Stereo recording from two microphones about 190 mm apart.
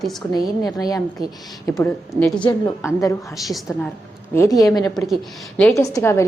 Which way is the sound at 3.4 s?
Centre (ahead or behind).